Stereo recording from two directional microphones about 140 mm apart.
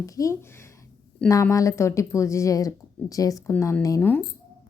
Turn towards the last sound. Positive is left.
turn(degrees=25)  # may be behind; listen again after turning